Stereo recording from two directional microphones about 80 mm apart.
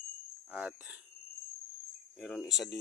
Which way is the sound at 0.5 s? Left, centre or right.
Centre.